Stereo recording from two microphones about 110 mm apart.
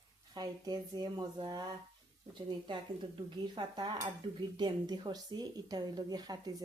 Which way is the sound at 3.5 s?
45° right (ahead or behind).